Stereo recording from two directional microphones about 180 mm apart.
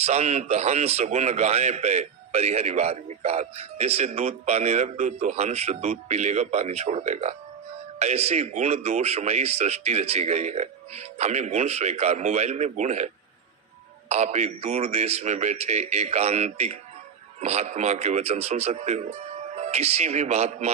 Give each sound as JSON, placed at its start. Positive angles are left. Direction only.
{"t": 0.0, "sound": "a man's voice", "side_deg": -40}
{"t": 14.1, "sound": "a man's voice", "side_deg": -35}